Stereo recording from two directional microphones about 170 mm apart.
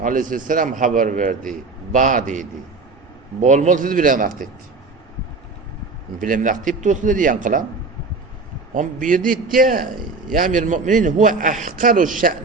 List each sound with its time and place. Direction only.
0.0 s a man's voice: 50° right (ahead or behind)
6.1 s a man's voice: 50° right (ahead or behind)
8.7 s a man's voice: 50° right (ahead or behind)